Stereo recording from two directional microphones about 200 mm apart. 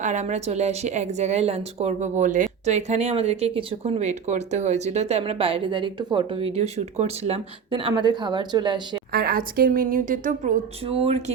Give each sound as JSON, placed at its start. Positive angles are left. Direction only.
{"t": 0.0, "sound": "speech", "side_deg": -35}
{"t": 9.1, "sound": "a woman's voice", "side_deg": -50}
{"t": 10.8, "sound": "speech", "side_deg": -30}